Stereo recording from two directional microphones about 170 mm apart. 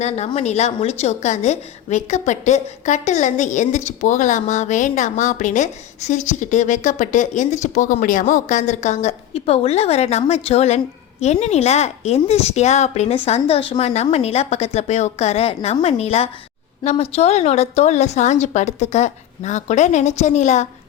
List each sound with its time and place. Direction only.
0.3 s a woman's voice: 40° left (ahead or behind)